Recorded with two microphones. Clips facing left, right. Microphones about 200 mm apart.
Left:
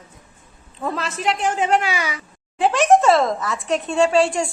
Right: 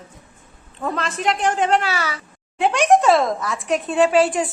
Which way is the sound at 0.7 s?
5° left (ahead or behind).